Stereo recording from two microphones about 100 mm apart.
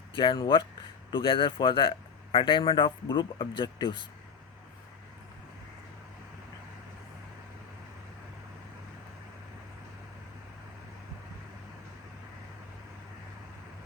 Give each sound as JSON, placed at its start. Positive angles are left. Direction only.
{"t": 0.3, "sound": "a man's voice", "side_deg": 50}